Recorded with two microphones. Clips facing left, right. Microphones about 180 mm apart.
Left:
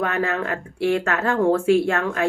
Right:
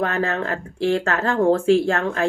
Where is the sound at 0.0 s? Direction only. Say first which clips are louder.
Right 1 dB; 30° right (ahead or behind).